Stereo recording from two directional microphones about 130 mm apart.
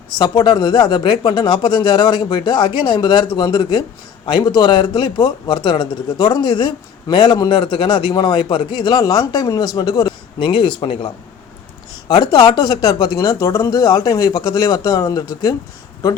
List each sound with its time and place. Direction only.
0.2 s speech: 35° left (ahead or behind)